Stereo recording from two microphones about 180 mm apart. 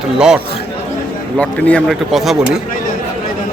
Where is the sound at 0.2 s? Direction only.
5° right (ahead or behind).